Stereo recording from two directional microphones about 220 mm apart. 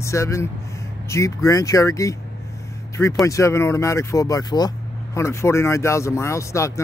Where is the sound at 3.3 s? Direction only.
15° left (ahead or behind).